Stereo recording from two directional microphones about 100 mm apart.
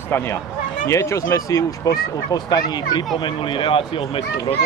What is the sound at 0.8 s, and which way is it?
Speech, 30° left (ahead or behind).